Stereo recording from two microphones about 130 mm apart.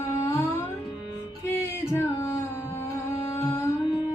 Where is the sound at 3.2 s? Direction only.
25° left (ahead or behind).